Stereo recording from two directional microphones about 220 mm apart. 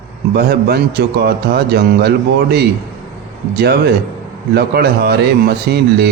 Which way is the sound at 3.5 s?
45° right (ahead or behind).